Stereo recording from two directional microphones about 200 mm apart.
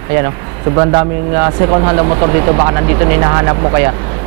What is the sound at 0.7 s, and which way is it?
Speech, 20° right (ahead or behind).